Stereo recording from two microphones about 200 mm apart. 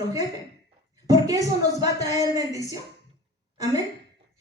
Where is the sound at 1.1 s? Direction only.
15° right (ahead or behind).